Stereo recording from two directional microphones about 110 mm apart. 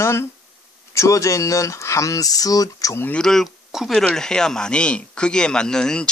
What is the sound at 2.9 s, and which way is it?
Speech, 20° left (ahead or behind).